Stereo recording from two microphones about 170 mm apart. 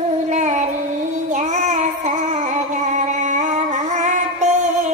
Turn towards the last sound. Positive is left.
turn(degrees=-45)  # may be behind; listen again after turning